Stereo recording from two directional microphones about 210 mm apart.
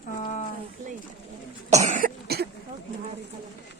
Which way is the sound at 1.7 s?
35° right (ahead or behind).